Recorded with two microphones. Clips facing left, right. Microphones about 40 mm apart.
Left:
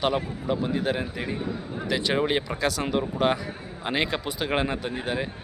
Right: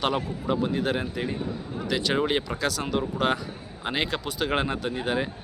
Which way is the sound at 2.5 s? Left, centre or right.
Centre.